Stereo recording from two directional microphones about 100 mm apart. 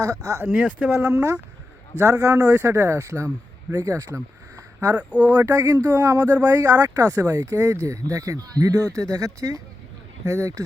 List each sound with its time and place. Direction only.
0.0 s speech: 35° right (ahead or behind)
0.5 s speech: 15° right (ahead or behind)
0.9 s speech: 30° right (ahead or behind)